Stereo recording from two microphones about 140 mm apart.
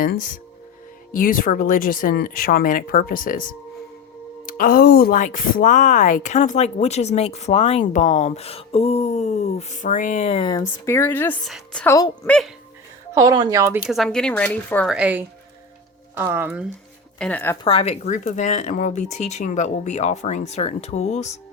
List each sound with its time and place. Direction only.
0.0 s speech: 85° left
4.4 s a woman's voice: 90° left; by 10.3 s 60° left (ahead or behind)
10.3 s speech: 30° left (ahead or behind); by 11.3 s 15° left (ahead or behind)
11.4 s a woman's voice: 5° left (ahead or behind)
11.9 s a woman's voice: 25° left (ahead or behind)
12.2 s speech: 5° left (ahead or behind)
13.1 s speech: 25° right (ahead or behind)
13.8 s speech: centre (ahead or behind)
14.8 s speech: 10° right (ahead or behind)
17.2 s speech: 10° left (ahead or behind)
17.6 s a woman's voice: 40° left (ahead or behind)